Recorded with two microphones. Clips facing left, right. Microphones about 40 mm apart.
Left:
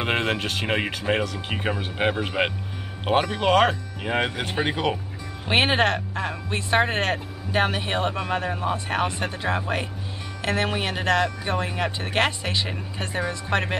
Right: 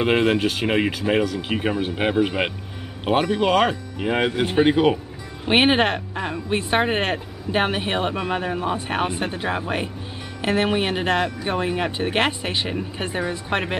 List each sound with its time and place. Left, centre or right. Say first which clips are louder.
0.0 s speech: right 6 dB; centre